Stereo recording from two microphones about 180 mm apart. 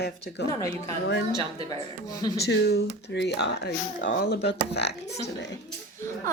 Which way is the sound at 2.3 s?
65° left (ahead or behind).